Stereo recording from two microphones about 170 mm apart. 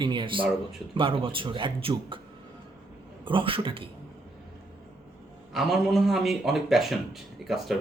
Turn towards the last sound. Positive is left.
turn(degrees=0)  # may be behind; listen again after turning